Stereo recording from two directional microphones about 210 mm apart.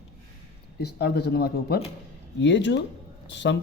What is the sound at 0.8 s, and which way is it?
Speech, 50° left (ahead or behind).